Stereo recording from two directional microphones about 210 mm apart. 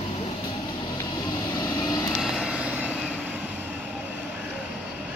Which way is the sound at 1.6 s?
15° left (ahead or behind).